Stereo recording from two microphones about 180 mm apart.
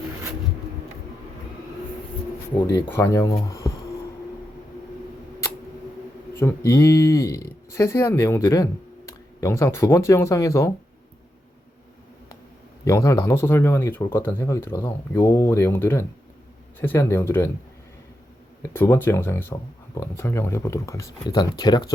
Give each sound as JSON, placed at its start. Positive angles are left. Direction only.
{"t": 2.9, "sound": "speech", "side_deg": 15}
{"t": 6.4, "sound": "speech", "side_deg": 15}
{"t": 12.8, "sound": "speech", "side_deg": 15}
{"t": 18.7, "sound": "speech", "side_deg": 10}